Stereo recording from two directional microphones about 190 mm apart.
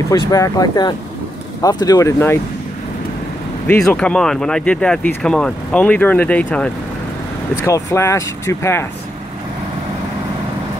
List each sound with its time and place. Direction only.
0.1 s speech: 20° left (ahead or behind)
3.6 s speech: 5° left (ahead or behind)